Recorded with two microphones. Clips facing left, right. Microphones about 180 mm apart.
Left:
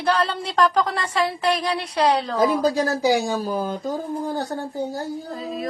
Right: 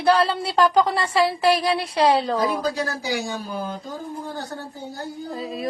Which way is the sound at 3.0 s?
45° left (ahead or behind).